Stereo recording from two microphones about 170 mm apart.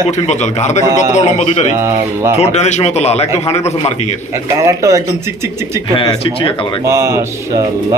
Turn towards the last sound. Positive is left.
turn(degrees=-15)  # may be behind; listen again after turning